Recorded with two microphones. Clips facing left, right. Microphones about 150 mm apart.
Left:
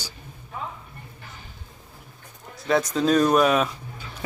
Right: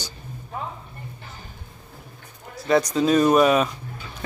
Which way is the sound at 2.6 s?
Centre (ahead or behind).